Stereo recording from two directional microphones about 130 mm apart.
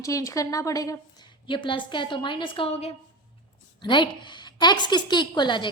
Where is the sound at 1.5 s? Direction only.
40° left (ahead or behind).